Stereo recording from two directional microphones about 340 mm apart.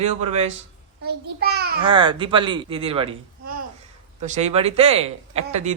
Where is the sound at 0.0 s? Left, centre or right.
Centre.